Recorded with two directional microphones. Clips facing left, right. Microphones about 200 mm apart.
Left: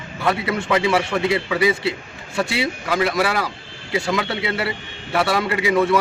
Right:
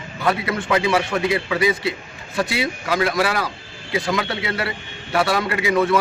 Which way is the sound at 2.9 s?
Centre (ahead or behind).